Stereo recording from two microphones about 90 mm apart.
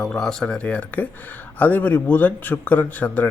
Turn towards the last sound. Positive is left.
turn(degrees=20)  # may be behind; listen again after turning